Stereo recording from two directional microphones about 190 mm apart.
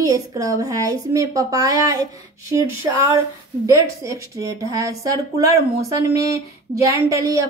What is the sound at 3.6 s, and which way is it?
A woman's voice, 15° right (ahead or behind).